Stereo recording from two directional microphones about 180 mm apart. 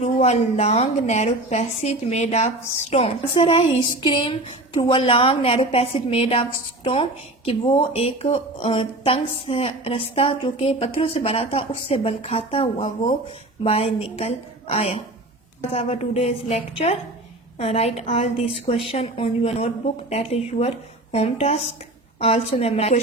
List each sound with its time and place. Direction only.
0.0 s speech: 40° left (ahead or behind)